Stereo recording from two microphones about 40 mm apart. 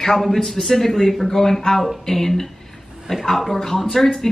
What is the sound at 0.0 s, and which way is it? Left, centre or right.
A man's voice, centre.